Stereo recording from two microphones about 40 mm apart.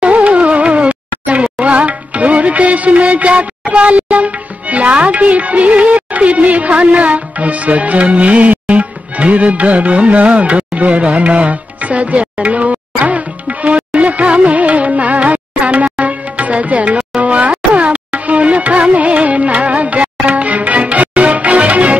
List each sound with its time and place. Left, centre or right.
0.0 s music: right
17.2 s a sound: right
17.7 s music: right